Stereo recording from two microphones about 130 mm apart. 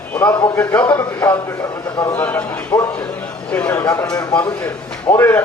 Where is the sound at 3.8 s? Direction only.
25° left (ahead or behind).